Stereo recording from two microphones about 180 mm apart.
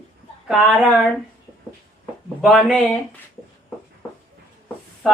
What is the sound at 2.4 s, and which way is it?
Speech, centre (ahead or behind).